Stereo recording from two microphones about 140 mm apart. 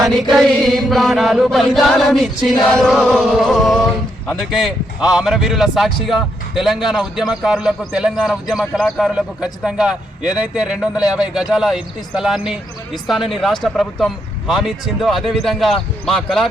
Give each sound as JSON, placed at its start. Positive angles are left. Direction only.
{"t": 0.0, "sound": "a man's voice", "side_deg": 0}